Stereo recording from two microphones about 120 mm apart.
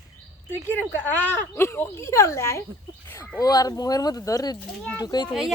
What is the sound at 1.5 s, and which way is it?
Speech, 20° left (ahead or behind).